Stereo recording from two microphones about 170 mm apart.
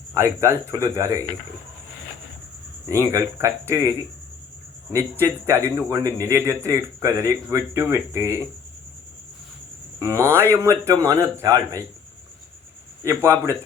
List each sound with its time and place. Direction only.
0.2 s a man's voice: 15° right (ahead or behind)
2.9 s a man's voice: 15° right (ahead or behind)
5.2 s a man's voice: 15° right (ahead or behind)
10.0 s a man's voice: 15° right (ahead or behind)
13.0 s a man's voice: 15° right (ahead or behind)